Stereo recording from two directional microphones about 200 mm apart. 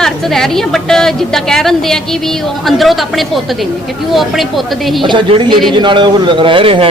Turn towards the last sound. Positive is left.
turn(degrees=-25)  # may be behind; listen again after turning